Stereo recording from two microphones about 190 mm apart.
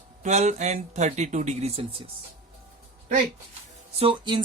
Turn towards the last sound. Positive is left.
turn(degrees=-25)  # may be behind; listen again after turning